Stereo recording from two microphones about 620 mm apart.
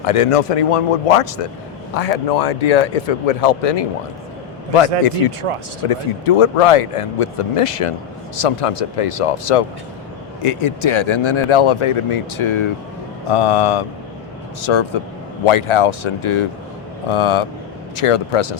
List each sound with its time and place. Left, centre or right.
0.0 s speech: left
2.0 s speech: left
5.5 s speech: right
5.9 s speech: left